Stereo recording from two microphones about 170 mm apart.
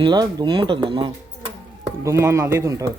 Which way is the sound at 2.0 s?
15° right (ahead or behind).